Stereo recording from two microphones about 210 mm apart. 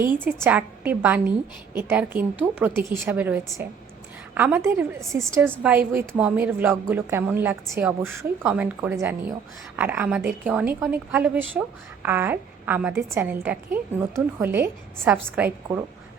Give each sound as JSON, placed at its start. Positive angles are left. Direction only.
{"t": 0.3, "sound": "a woman's voice", "side_deg": -10}